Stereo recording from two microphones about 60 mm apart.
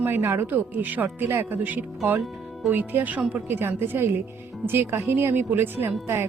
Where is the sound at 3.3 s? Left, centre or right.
Right.